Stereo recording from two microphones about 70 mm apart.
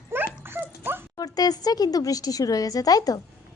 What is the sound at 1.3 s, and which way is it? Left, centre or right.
A woman's voice, left.